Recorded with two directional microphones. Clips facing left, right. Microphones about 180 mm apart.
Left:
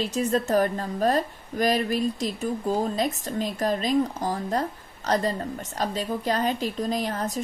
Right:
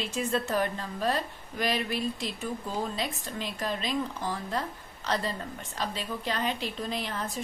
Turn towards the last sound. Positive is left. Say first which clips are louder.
# left 6 dB
turn(degrees=40)  # may be behind; listen again after turning